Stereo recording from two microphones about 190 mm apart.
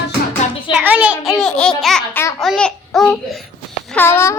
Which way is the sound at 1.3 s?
Centre (ahead or behind).